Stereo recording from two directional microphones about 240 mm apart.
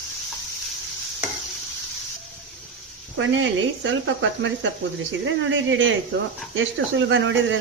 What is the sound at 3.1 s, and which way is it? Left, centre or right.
Speech, right.